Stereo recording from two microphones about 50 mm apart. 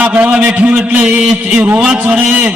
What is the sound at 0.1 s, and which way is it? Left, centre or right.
Speech, right.